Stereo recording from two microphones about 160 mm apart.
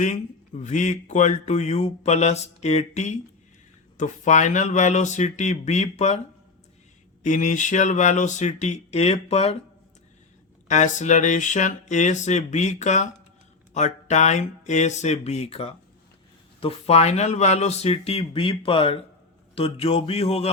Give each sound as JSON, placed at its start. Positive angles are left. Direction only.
{"t": 0.0, "sound": "speech", "side_deg": 50}
{"t": 7.2, "sound": "speech", "side_deg": 50}
{"t": 10.7, "sound": "speech", "side_deg": 50}